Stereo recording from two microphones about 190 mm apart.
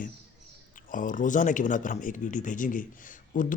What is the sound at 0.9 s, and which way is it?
Speech, 45° left (ahead or behind).